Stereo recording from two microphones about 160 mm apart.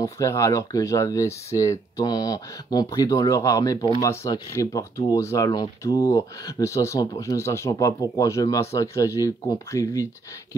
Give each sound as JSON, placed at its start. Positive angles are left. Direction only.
{"t": 0.0, "sound": "speech", "side_deg": 20}